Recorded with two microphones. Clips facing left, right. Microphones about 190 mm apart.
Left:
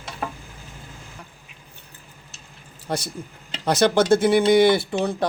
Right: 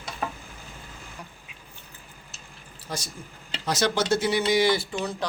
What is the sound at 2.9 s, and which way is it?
A man's voice, 60° left (ahead or behind).